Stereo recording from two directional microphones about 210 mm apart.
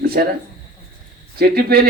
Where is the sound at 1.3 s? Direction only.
45° right (ahead or behind).